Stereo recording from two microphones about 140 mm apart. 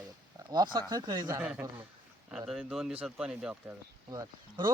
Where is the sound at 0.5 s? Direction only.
30° right (ahead or behind).